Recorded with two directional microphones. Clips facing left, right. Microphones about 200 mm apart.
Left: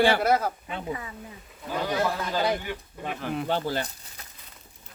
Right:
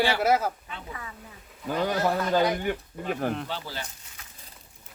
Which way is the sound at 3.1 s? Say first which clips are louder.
Right 4 dB; 50° right (ahead or behind).